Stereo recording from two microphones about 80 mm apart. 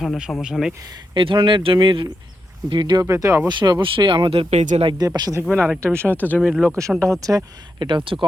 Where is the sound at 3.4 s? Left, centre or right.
Right.